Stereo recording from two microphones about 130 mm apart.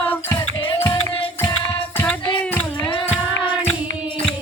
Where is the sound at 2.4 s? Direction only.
10° left (ahead or behind).